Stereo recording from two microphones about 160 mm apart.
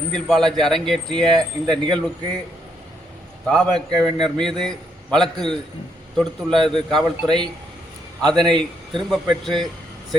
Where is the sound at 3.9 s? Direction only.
25° right (ahead or behind).